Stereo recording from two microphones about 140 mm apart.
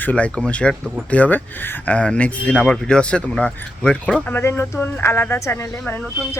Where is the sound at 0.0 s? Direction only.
10° left (ahead or behind).